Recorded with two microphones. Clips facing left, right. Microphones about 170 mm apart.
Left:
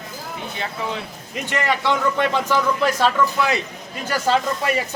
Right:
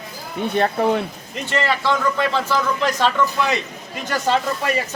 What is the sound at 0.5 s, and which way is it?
Speech, 55° right (ahead or behind).